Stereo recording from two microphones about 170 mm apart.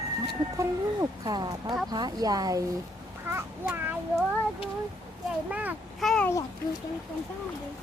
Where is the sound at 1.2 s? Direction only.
25° right (ahead or behind).